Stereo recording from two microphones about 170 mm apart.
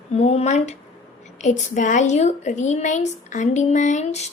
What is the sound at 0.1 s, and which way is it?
A woman's voice, 40° left (ahead or behind).